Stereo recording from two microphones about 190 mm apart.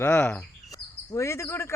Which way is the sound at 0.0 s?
10° left (ahead or behind).